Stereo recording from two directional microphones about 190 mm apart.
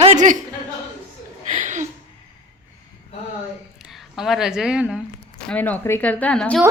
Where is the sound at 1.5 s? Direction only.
40° right (ahead or behind).